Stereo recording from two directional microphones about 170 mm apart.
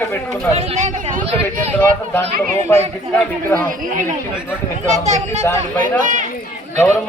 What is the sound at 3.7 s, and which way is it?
Speech, 55° right (ahead or behind).